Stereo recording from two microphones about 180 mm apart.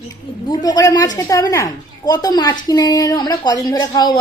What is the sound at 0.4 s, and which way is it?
A woman's voice, 20° left (ahead or behind).